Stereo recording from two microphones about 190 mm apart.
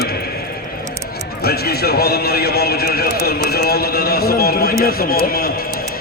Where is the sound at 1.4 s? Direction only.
55° left (ahead or behind).